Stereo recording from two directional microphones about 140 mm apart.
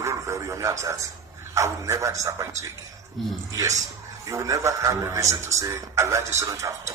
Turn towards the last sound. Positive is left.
turn(degrees=-20)  # may be behind; listen again after turning